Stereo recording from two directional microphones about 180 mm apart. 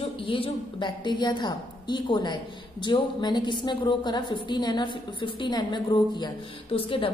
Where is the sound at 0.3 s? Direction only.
25° left (ahead or behind).